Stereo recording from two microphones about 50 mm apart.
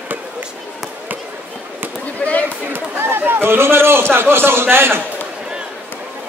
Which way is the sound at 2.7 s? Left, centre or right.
Right.